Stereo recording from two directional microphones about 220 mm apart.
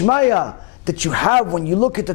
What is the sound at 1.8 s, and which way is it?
Speech, 15° left (ahead or behind).